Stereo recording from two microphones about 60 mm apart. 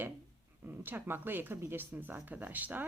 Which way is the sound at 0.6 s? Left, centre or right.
Right.